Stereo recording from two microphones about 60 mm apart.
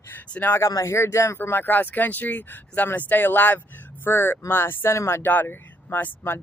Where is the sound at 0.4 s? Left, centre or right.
Left.